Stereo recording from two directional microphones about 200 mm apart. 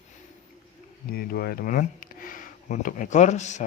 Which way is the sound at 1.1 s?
50° left (ahead or behind).